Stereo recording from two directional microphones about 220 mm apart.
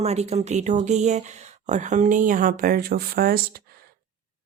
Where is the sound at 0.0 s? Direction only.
30° right (ahead or behind).